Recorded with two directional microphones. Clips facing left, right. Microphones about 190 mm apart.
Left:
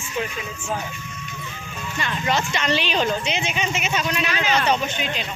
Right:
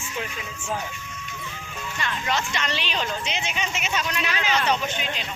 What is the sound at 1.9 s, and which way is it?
Speech, 25° left (ahead or behind).